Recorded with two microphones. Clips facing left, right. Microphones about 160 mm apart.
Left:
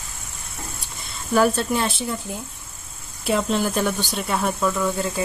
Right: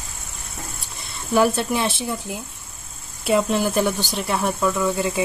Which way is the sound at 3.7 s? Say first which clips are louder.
Right 2 dB; 15° right (ahead or behind).